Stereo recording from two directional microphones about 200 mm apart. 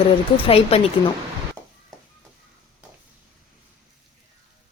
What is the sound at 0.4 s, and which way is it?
Speech, 30° left (ahead or behind).